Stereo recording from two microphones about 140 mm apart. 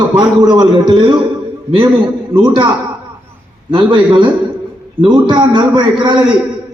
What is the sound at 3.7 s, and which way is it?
A man's voice, 35° right (ahead or behind).